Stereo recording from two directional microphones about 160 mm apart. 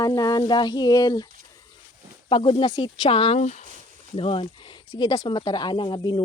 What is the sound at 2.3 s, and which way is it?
Speech, 35° left (ahead or behind).